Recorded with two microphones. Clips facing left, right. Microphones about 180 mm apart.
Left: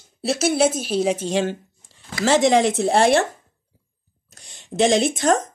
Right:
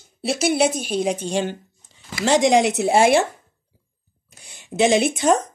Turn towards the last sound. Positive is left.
turn(degrees=0)  # may be behind; listen again after turning